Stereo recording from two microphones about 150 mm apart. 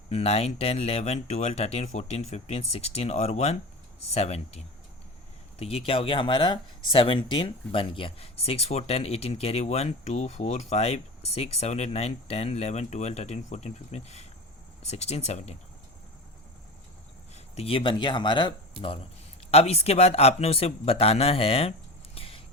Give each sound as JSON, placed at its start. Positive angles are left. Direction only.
{"t": 0.1, "sound": "speech", "side_deg": 45}
{"t": 17.3, "sound": "speech", "side_deg": 45}
{"t": 19.5, "sound": "speech", "side_deg": 45}
{"t": 22.1, "sound": "a sound", "side_deg": 40}